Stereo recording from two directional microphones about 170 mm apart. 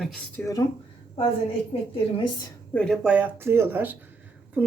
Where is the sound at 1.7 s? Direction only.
35° left (ahead or behind).